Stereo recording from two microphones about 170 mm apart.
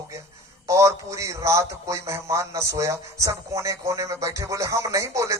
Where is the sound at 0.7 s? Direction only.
20° right (ahead or behind).